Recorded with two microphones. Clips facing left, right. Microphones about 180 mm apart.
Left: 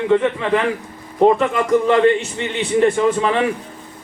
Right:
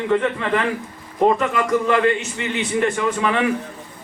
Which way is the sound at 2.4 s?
30° left (ahead or behind).